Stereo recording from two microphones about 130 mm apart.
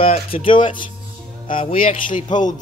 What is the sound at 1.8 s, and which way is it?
Speech, 90° left.